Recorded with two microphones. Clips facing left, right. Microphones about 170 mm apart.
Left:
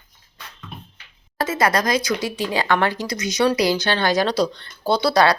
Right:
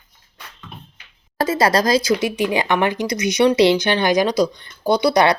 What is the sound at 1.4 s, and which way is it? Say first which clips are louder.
Speech: right 3 dB; 30° right (ahead or behind).